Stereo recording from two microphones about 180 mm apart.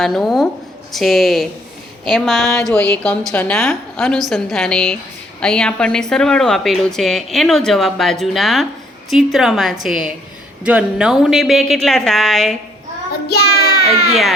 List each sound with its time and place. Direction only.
0.0 s a woman's voice: centre (ahead or behind)
13.2 s child singing: 60° left (ahead or behind)